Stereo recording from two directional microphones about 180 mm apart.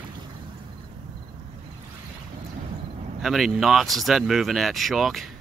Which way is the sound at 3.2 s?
Centre (ahead or behind).